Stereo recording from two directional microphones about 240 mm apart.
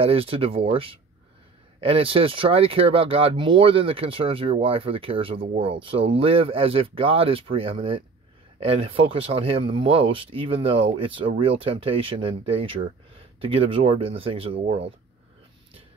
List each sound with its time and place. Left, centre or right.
0.0 s speech: right